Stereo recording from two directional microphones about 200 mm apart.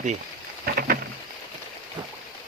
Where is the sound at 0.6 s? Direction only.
50° right (ahead or behind).